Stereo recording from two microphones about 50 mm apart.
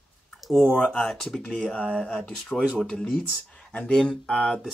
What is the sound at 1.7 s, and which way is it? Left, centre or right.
Speech, centre.